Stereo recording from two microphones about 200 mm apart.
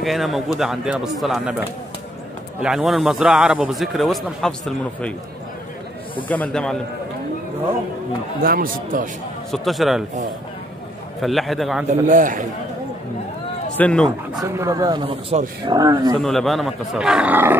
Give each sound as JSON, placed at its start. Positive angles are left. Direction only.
{"t": 0.0, "sound": "a man's voice", "side_deg": 0}
{"t": 6.2, "sound": "a man's voice", "side_deg": 10}
{"t": 8.4, "sound": "speech", "side_deg": -45}
{"t": 9.5, "sound": "a man's voice", "side_deg": 0}
{"t": 11.1, "sound": "a man's voice", "side_deg": 0}
{"t": 11.9, "sound": "a man's voice", "side_deg": -40}
{"t": 13.7, "sound": "speech", "side_deg": 5}
{"t": 14.4, "sound": "speech", "side_deg": -15}
{"t": 16.2, "sound": "a man's voice", "side_deg": 0}